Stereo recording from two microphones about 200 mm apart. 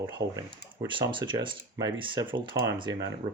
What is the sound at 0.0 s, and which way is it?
Speech, 15° right (ahead or behind).